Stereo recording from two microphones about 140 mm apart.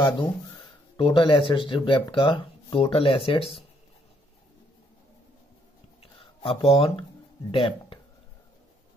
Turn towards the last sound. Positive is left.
turn(degrees=40)  # may be behind; listen again after turning